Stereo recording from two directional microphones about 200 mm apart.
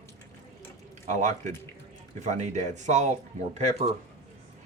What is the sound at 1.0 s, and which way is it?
Speech, 35° right (ahead or behind).